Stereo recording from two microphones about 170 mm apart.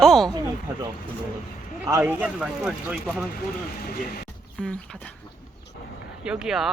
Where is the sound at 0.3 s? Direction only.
25° right (ahead or behind).